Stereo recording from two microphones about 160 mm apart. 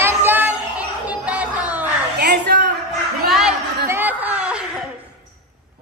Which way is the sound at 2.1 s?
90° right.